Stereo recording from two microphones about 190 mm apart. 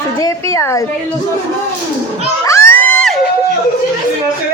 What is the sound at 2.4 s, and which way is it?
Children shouting, 15° left (ahead or behind).